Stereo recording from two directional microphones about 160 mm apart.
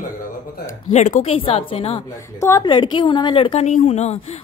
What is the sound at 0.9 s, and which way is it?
A woman's voice, 45° left (ahead or behind).